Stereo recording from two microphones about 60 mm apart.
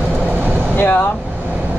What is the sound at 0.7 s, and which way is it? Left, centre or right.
Vehicle, left.